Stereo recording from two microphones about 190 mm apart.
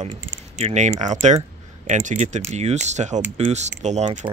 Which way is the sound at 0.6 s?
35° right (ahead or behind).